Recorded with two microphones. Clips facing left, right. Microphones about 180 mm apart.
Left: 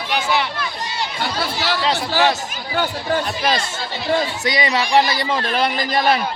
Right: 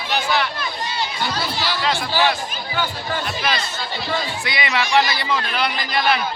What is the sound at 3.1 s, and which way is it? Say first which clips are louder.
A man's voice: left 4 dB; 40° left (ahead or behind).